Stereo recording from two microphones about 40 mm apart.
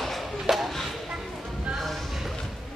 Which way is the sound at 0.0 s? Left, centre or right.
Centre.